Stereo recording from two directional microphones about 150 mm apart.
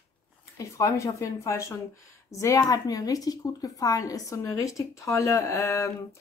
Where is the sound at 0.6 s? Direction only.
20° left (ahead or behind).